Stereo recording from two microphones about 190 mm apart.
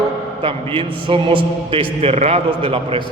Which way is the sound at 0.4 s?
30° right (ahead or behind).